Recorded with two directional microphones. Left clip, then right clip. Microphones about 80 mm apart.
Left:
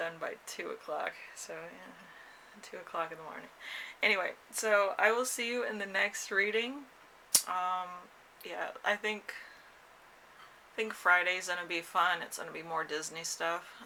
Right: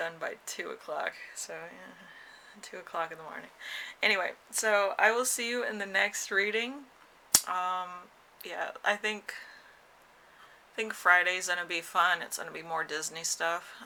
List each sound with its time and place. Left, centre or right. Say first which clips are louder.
0.0 s speech: right 2 dB; right
2.6 s speech: right 2 dB; right
7.3 s a sound: right 3 dB; right
8.4 s speech: right 3 dB; right
10.8 s speech: right 3 dB; right